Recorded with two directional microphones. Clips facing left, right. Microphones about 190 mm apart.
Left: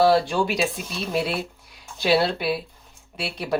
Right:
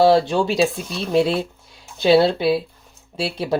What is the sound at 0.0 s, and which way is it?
Speech, 25° right (ahead or behind).